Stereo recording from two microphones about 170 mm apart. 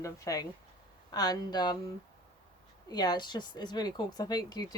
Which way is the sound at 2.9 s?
25° left (ahead or behind).